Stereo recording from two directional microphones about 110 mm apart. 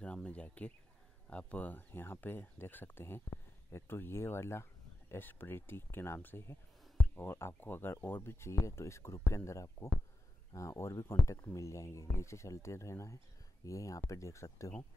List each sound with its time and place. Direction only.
0.0 s speech: 10° left (ahead or behind); by 14.7 s 25° left (ahead or behind)